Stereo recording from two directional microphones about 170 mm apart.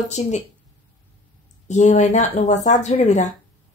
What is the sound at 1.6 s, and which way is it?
A woman's voice, 45° left (ahead or behind).